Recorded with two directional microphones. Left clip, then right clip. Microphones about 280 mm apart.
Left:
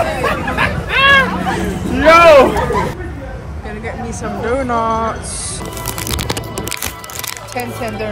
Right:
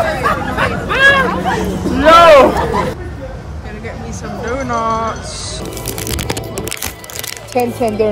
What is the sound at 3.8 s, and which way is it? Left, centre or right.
Speech, centre.